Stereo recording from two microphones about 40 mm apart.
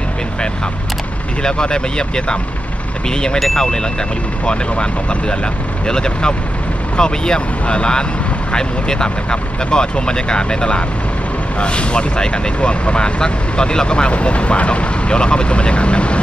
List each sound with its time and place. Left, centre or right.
1.4 s speech: left
3.3 s speech: centre
4.5 s speech: left